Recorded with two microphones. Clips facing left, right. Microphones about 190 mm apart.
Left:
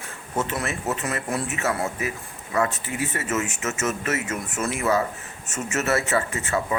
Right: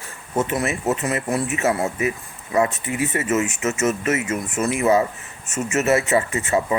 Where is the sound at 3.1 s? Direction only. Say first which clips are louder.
Right 7 dB; 15° right (ahead or behind).